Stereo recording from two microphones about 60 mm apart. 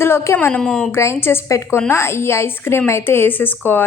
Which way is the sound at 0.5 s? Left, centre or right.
Centre.